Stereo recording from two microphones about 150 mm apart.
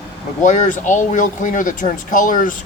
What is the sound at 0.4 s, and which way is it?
Speech, 55° left (ahead or behind).